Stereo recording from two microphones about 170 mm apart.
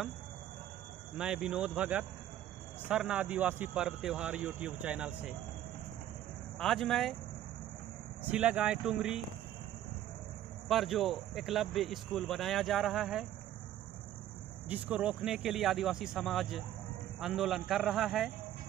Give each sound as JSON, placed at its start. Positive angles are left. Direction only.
{"t": 1.1, "sound": "a man's voice", "side_deg": -5}
{"t": 6.6, "sound": "a man's voice", "side_deg": 0}
{"t": 8.2, "sound": "speech", "side_deg": -10}
{"t": 10.7, "sound": "a man's voice", "side_deg": 0}
{"t": 14.7, "sound": "a man's voice", "side_deg": -5}